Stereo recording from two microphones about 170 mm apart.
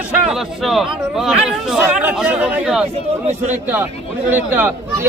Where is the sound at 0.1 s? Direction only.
Centre (ahead or behind).